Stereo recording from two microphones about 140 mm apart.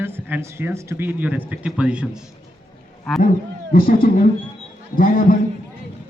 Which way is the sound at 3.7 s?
90° left.